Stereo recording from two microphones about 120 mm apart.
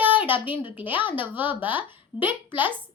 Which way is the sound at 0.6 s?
15° right (ahead or behind).